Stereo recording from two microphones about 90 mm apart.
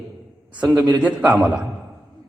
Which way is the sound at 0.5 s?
15° right (ahead or behind).